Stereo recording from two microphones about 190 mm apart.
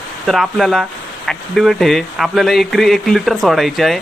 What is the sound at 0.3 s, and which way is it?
Speech, centre (ahead or behind).